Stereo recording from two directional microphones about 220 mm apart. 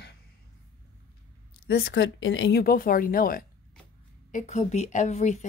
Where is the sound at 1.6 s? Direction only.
50° left (ahead or behind).